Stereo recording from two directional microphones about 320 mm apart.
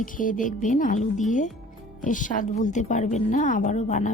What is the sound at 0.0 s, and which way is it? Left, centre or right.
A woman's voice, left.